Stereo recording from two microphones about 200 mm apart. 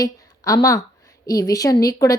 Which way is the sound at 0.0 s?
15° left (ahead or behind).